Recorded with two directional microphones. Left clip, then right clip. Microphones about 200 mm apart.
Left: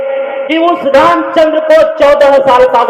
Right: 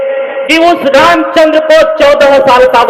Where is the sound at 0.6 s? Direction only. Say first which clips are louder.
Right 1 dB; 30° right (ahead or behind).